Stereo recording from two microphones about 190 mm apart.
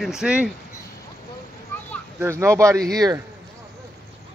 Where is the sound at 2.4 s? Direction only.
15° right (ahead or behind).